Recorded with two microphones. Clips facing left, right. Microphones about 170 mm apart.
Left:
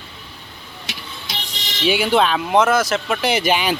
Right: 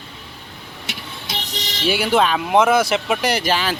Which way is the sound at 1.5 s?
40° right (ahead or behind).